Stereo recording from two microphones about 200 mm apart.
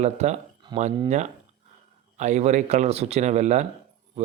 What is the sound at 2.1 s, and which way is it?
Speech, 35° right (ahead or behind).